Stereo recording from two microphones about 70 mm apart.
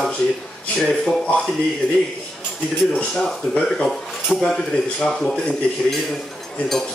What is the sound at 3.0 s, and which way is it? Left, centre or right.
Speech, centre.